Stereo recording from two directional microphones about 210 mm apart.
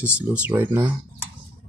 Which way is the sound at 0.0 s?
5° right (ahead or behind).